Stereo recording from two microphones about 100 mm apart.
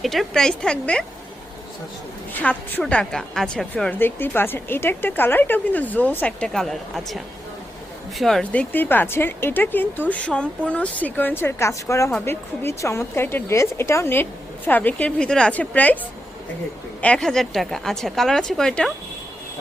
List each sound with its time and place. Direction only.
0.0 s a woman's voice: centre (ahead or behind)
2.3 s a woman's voice: 15° left (ahead or behind)
3.9 s speech: 20° left (ahead or behind)
6.5 s a woman's voice: 5° left (ahead or behind)
8.2 s a woman's voice: 5° left (ahead or behind)
8.5 s a woman's voice: 20° left (ahead or behind)
17.0 s a woman's voice: 10° left (ahead or behind)